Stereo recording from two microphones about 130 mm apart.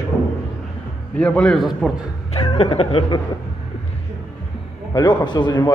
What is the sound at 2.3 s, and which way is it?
Speech, 50° left (ahead or behind).